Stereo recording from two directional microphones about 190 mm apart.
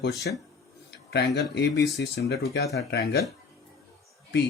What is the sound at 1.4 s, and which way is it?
Speech, 65° left (ahead or behind).